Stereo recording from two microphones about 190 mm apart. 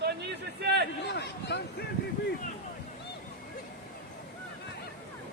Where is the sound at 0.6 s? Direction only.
60° right (ahead or behind).